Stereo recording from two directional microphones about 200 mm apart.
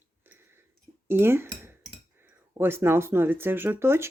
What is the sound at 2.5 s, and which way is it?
Speech, 10° right (ahead or behind).